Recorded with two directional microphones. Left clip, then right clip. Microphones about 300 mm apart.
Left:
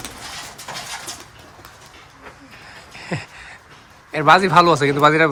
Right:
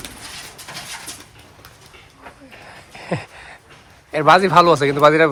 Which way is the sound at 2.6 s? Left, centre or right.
Centre.